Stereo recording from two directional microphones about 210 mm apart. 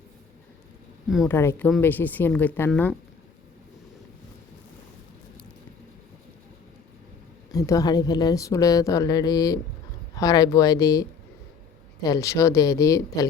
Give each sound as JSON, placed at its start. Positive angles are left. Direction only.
{"t": 1.3, "sound": "a woman's voice", "side_deg": 10}
{"t": 7.5, "sound": "a woman's voice", "side_deg": 15}
{"t": 12.0, "sound": "a woman's voice", "side_deg": 15}